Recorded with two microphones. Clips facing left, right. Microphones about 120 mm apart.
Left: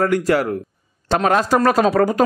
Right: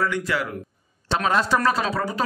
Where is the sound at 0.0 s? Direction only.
45° left (ahead or behind).